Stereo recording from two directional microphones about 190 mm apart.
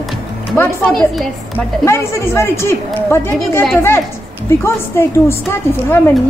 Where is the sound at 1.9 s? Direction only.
15° left (ahead or behind).